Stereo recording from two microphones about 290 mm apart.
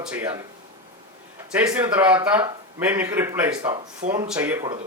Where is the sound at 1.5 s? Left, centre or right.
Centre.